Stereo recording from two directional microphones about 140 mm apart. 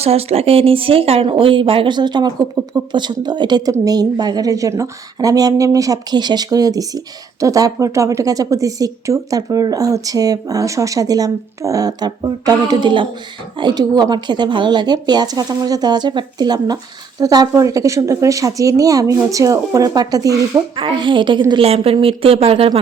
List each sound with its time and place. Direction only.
0.0 s a woman's voice: 45° right (ahead or behind); by 20.4 s 25° right (ahead or behind)
20.7 s a woman's voice: 35° right (ahead or behind)